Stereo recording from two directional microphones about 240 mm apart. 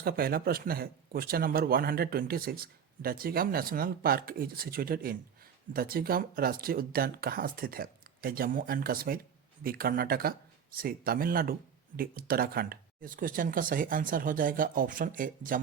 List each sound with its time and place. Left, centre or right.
0.0 s speech: right